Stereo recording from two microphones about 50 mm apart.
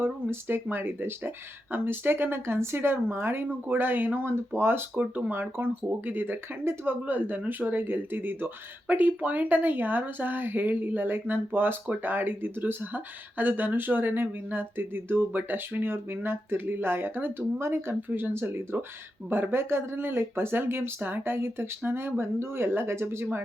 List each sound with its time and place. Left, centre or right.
0.0 s speech: right
4.9 s speech: right
18.1 s speech: right